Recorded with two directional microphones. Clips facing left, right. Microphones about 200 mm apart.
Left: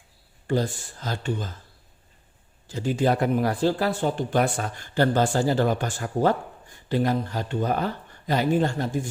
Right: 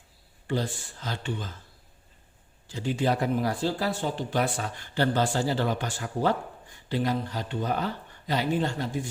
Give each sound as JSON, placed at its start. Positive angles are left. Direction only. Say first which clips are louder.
{"t": 0.4, "sound": "speech", "louder": "left 4 dB", "side_deg": 45}
{"t": 2.6, "sound": "speech", "louder": "left 4 dB", "side_deg": 45}